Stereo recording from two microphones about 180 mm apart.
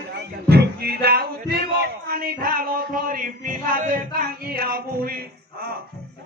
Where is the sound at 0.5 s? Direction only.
60° right (ahead or behind).